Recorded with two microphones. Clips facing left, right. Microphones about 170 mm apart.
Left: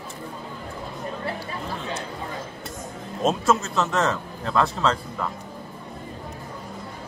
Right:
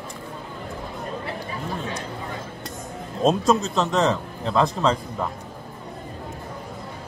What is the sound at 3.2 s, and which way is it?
Speech, 15° right (ahead or behind).